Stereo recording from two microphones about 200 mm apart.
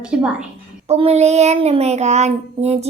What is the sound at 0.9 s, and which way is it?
Child singing, 30° right (ahead or behind).